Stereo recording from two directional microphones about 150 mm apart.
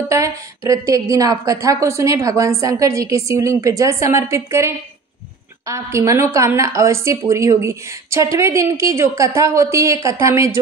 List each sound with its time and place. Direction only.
0.1 s a woman's voice: 20° right (ahead or behind)